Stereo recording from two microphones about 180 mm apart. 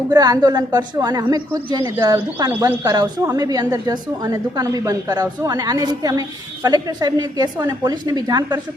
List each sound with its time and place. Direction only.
0.1 s a woman's voice: 20° right (ahead or behind)